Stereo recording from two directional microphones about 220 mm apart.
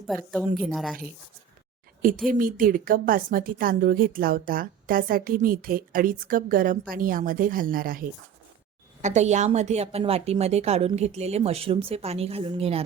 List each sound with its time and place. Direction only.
0.1 s speech: 5° left (ahead or behind)
2.0 s a woman's voice: 40° right (ahead or behind)